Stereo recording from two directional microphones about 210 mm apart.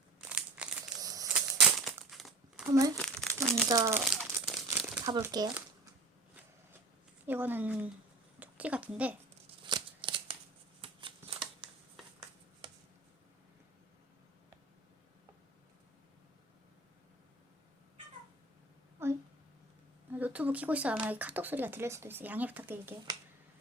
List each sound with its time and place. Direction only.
0.2 s crumpling: 5° right (ahead or behind)
0.9 s a sound: 15° right (ahead or behind)
1.3 s crumpling: centre (ahead or behind)
2.7 s speech: 15° right (ahead or behind)
3.0 s crumpling: 5° left (ahead or behind)
3.7 s speech: 15° right (ahead or behind)
4.1 s crumpling: 5° right (ahead or behind)
4.9 s speech: 15° right (ahead or behind)
7.3 s a woman's voice: 10° right (ahead or behind)
9.6 s shuffling cards: 20° right (ahead or behind)
19.0 s a sound: 10° right (ahead or behind)
20.1 s speech: 10° right (ahead or behind)